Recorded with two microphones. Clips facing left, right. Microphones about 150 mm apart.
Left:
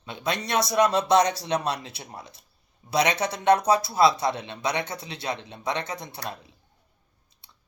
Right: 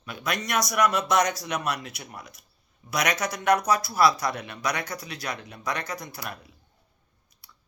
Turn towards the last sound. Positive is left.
turn(degrees=25)  # may be behind; listen again after turning